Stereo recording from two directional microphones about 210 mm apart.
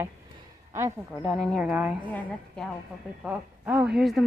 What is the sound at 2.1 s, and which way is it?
A woman's voice, 5° left (ahead or behind).